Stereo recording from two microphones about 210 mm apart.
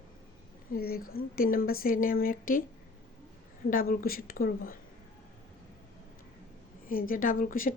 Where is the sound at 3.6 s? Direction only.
45° left (ahead or behind).